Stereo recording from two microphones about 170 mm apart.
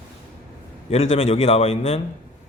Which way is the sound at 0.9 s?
40° left (ahead or behind).